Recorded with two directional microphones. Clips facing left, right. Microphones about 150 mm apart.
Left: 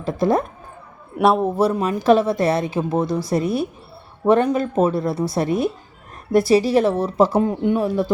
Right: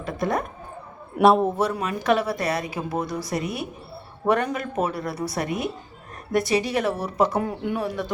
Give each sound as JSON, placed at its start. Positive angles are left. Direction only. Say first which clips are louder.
{"t": 0.0, "sound": "a woman's voice", "louder": "left 7 dB", "side_deg": 30}
{"t": 1.1, "sound": "a man's voice", "louder": "even", "side_deg": 0}
{"t": 1.5, "sound": "a woman's voice", "louder": "left 6 dB", "side_deg": 30}